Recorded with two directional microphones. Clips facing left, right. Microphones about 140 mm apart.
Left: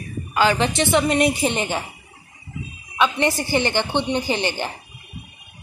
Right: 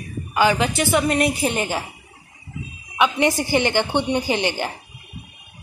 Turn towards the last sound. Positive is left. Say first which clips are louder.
# right 1 dB
turn(degrees=-15)  # may be behind; listen again after turning